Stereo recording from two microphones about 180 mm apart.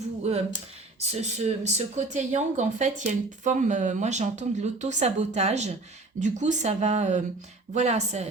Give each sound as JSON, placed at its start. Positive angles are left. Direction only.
{"t": 0.2, "sound": "speech", "side_deg": -35}